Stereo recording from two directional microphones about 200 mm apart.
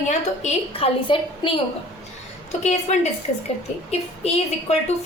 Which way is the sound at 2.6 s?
35° left (ahead or behind).